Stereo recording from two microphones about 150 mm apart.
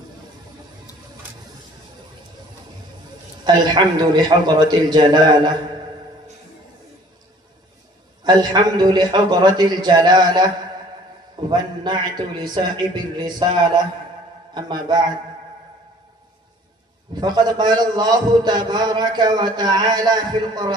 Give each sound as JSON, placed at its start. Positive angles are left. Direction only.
{"t": 3.5, "sound": "a man's voice", "side_deg": -30}
{"t": 8.2, "sound": "a man's voice", "side_deg": -30}
{"t": 17.2, "sound": "a man's voice", "side_deg": -30}